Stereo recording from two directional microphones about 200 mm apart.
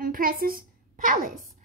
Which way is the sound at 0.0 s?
45° right (ahead or behind).